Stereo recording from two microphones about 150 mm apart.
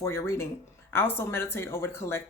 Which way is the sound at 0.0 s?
15° left (ahead or behind).